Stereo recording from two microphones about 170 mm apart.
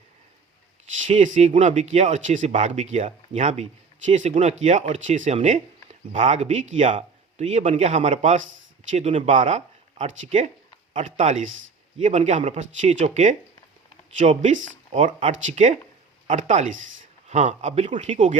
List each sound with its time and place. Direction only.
1.0 s speech: 45° right (ahead or behind)